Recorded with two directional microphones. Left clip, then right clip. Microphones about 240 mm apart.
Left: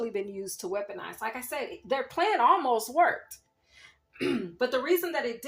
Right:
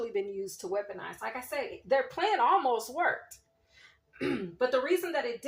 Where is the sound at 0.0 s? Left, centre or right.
Left.